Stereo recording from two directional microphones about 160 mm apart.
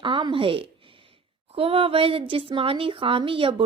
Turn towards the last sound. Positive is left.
turn(degrees=-35)  # may be behind; listen again after turning